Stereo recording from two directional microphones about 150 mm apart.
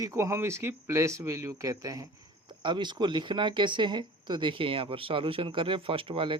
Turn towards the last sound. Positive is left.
turn(degrees=-35)  # may be behind; listen again after turning